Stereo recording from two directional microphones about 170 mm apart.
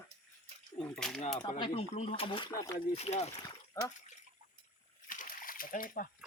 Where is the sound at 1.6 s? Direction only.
30° left (ahead or behind).